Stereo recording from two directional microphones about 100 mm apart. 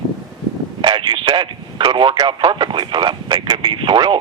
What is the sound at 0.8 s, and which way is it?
Speech, 50° right (ahead or behind).